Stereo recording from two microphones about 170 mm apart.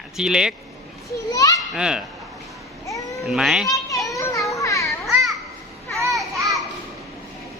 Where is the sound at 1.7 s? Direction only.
5° right (ahead or behind).